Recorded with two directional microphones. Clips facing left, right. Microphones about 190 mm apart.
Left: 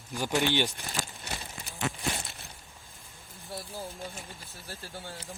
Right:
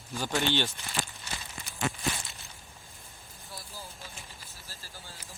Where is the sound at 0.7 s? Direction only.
55° left (ahead or behind).